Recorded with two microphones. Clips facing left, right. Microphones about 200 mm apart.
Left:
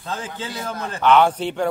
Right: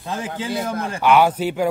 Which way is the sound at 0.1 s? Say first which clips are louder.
Right 4 dB; 15° right (ahead or behind).